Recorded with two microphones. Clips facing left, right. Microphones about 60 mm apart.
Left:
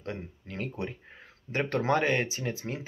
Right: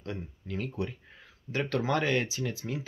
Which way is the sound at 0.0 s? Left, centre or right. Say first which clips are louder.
Left 1 dB; left.